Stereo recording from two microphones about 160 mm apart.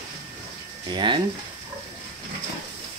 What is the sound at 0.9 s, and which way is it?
Speech, 30° right (ahead or behind).